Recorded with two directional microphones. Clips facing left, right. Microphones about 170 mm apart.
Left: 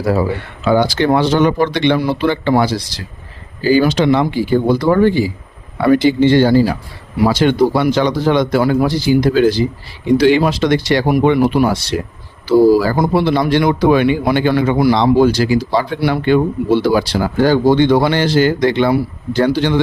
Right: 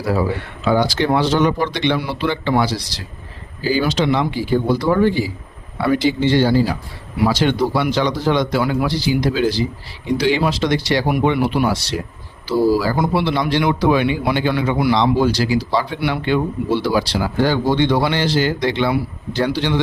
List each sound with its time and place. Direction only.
0.7 s speech: 60° left (ahead or behind)
2.0 s speech: 45° left (ahead or behind)